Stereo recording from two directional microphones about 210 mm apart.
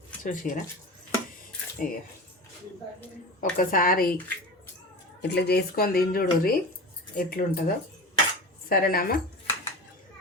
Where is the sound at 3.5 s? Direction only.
40° left (ahead or behind).